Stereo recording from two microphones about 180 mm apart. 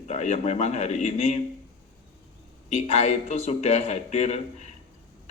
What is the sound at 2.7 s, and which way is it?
Speech, 35° left (ahead or behind).